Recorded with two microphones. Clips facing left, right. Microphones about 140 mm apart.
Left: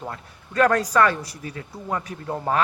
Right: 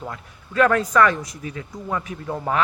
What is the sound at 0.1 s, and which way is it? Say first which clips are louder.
Speech: right 1 dB; 35° left (ahead or behind).